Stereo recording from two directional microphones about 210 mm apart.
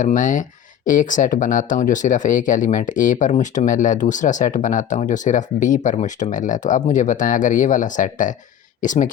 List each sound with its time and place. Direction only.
0.0 s speech: 35° left (ahead or behind)